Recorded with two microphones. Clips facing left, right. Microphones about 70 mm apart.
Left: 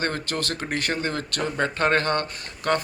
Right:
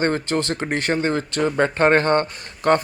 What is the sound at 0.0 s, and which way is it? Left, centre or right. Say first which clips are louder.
A man's voice: right 6 dB; right.